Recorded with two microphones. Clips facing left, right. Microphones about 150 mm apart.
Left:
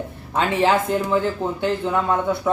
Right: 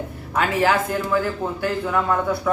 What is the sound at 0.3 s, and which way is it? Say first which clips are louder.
Speech: left 1 dB; 25° left (ahead or behind).